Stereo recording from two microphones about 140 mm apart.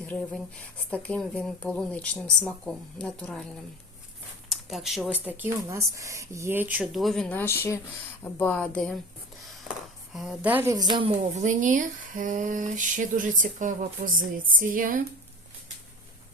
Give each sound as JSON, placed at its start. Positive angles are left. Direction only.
{"t": 0.0, "sound": "speech", "side_deg": 10}
{"t": 4.4, "sound": "speech", "side_deg": 0}
{"t": 5.2, "sound": "speech", "side_deg": -15}
{"t": 6.9, "sound": "speech", "side_deg": 0}
{"t": 7.3, "sound": "speech", "side_deg": 15}
{"t": 11.4, "sound": "a sound", "side_deg": -65}